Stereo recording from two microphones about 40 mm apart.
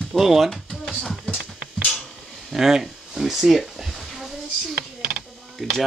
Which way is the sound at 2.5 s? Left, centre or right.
Centre.